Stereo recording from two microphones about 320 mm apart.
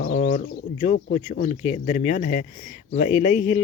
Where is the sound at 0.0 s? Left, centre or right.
Left.